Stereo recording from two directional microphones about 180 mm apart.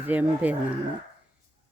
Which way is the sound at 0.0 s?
10° right (ahead or behind).